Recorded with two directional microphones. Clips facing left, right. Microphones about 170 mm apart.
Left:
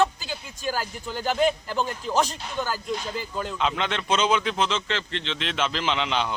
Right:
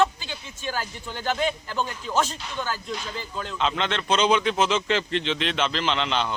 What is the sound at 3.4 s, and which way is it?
A man's voice, 10° left (ahead or behind).